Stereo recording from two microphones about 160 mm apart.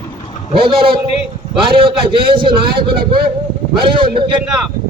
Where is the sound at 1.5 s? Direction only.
30° right (ahead or behind).